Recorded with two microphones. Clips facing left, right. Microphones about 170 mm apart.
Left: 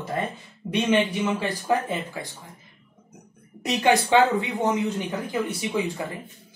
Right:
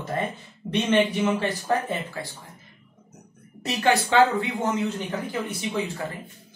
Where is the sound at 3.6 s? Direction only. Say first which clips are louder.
Left 2 dB; 15° left (ahead or behind).